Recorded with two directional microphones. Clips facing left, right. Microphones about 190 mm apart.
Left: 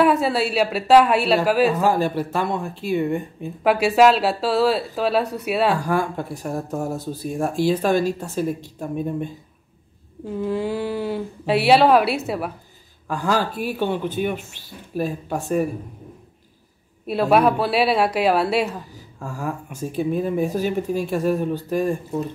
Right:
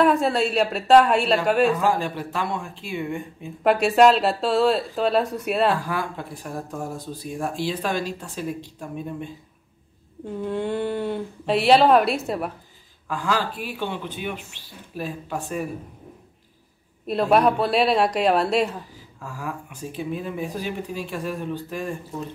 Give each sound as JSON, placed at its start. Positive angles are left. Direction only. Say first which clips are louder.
{"t": 0.0, "sound": "speech", "louder": "left 1 dB", "side_deg": 5}
{"t": 1.8, "sound": "speech", "louder": "left 4 dB", "side_deg": 40}
{"t": 3.6, "sound": "speech", "louder": "left 1 dB", "side_deg": 5}
{"t": 5.8, "sound": "speech", "louder": "left 6 dB", "side_deg": 45}
{"t": 10.2, "sound": "speech", "louder": "left 3 dB", "side_deg": 5}
{"t": 13.1, "sound": "speech", "louder": "left 3 dB", "side_deg": 45}
{"t": 17.0, "sound": "speech", "louder": "left 2 dB", "side_deg": 5}
{"t": 19.2, "sound": "speech", "louder": "left 4 dB", "side_deg": 45}